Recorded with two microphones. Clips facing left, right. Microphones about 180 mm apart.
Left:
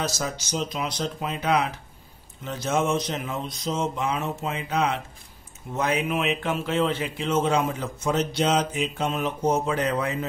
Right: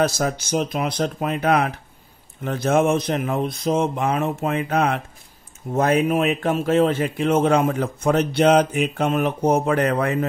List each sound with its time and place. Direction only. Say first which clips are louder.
0.0 s a man's voice: right 8 dB; 55° right (ahead or behind)